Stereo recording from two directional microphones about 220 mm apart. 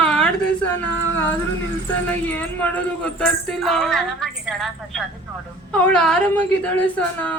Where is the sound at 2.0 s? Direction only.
10° left (ahead or behind).